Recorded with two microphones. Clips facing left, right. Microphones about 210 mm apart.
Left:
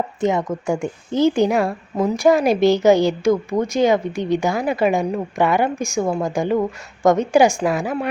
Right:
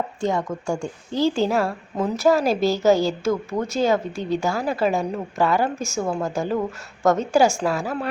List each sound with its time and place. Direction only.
0.2 s a woman's voice: 20° left (ahead or behind)